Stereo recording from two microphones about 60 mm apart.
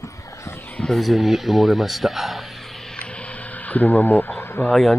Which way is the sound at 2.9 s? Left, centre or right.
Centre.